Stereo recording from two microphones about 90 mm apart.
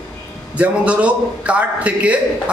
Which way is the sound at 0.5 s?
15° right (ahead or behind).